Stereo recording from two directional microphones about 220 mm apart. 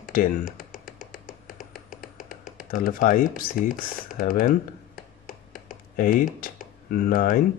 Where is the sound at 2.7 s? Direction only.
40° left (ahead or behind).